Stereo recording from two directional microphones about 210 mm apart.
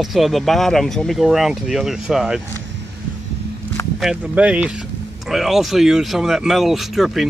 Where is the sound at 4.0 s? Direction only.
5° right (ahead or behind).